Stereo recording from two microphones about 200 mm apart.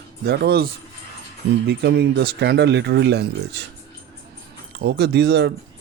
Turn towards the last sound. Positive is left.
turn(degrees=-60)  # may be behind; listen again after turning